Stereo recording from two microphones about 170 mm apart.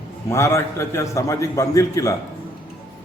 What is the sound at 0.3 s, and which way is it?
A man's voice, 15° left (ahead or behind).